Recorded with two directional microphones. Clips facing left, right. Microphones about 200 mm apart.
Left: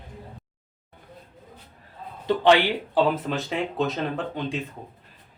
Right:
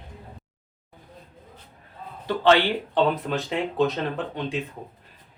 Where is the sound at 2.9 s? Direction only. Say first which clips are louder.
Even; centre (ahead or behind).